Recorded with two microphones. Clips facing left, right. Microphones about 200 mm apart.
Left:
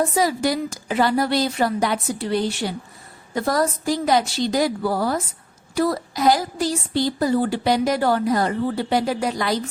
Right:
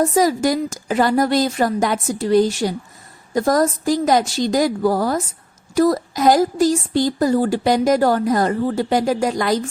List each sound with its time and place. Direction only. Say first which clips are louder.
0.1 s a woman's voice: right 4 dB; 45° right (ahead or behind)